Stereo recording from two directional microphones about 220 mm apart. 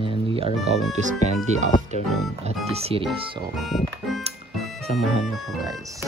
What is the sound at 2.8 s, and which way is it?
Speech, 25° right (ahead or behind).